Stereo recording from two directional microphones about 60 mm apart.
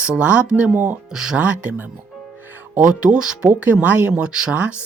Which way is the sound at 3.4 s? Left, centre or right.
Right.